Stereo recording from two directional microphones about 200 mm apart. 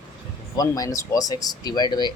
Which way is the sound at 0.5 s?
20° left (ahead or behind).